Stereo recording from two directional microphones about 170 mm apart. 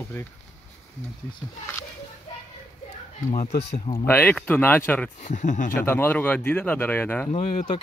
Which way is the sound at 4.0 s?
10° left (ahead or behind).